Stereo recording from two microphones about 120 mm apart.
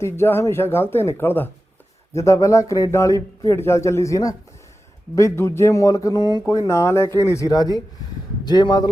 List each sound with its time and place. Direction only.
0.0 s speech: 20° left (ahead or behind)